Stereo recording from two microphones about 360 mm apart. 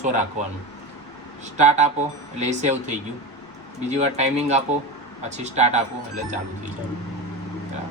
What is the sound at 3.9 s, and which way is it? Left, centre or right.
A man's voice, centre.